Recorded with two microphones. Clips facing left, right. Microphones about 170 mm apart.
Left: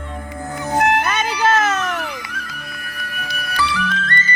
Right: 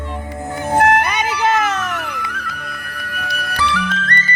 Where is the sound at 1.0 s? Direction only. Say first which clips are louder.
Even; 15° right (ahead or behind).